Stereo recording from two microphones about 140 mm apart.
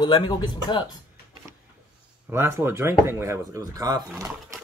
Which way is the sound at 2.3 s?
15° right (ahead or behind).